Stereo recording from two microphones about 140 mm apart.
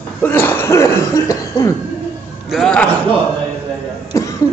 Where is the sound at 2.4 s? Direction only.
5° left (ahead or behind).